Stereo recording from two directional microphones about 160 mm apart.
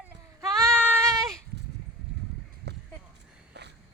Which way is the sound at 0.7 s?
10° left (ahead or behind).